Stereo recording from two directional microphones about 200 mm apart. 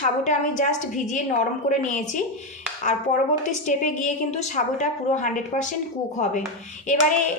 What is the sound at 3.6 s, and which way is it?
A woman's voice, 40° left (ahead or behind).